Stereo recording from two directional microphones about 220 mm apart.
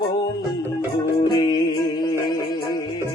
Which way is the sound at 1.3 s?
20° left (ahead or behind).